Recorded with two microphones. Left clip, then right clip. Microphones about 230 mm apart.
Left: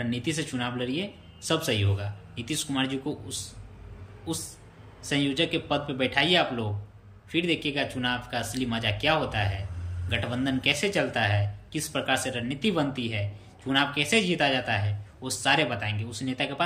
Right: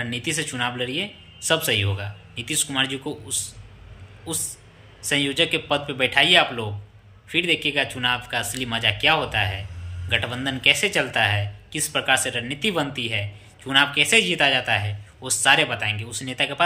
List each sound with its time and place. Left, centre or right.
0.0 s a man's voice: centre